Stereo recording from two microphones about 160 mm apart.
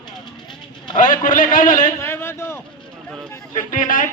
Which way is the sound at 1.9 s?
15° left (ahead or behind).